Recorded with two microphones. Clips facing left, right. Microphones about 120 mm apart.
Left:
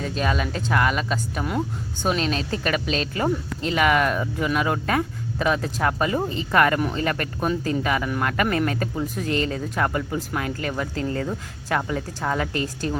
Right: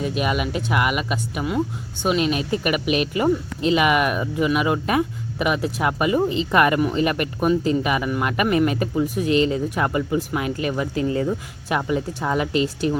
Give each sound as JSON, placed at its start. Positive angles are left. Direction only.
{"t": 0.0, "sound": "speech", "side_deg": -10}